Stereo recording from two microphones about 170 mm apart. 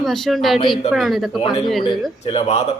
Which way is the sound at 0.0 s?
Centre (ahead or behind).